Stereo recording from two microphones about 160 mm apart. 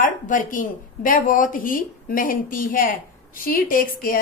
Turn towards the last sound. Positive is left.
turn(degrees=65)  # may be behind; listen again after turning